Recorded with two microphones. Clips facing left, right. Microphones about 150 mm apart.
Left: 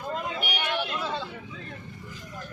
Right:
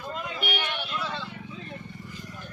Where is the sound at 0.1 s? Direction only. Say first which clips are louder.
Left 4 dB; 40° left (ahead or behind).